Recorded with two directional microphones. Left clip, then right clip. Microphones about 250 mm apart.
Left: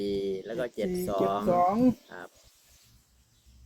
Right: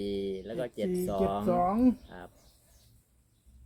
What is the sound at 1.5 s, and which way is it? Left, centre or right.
Speech, centre.